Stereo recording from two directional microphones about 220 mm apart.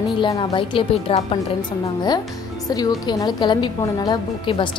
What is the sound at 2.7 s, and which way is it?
A woman's voice, 15° left (ahead or behind).